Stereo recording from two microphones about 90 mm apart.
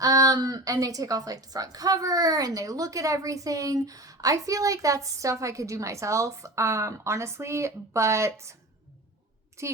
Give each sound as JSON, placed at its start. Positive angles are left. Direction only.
{"t": 0.0, "sound": "a woman's voice", "side_deg": -40}
{"t": 9.6, "sound": "a woman's voice", "side_deg": -30}